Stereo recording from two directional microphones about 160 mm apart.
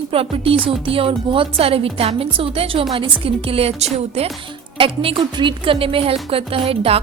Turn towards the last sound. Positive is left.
turn(degrees=-35)  # may be behind; listen again after turning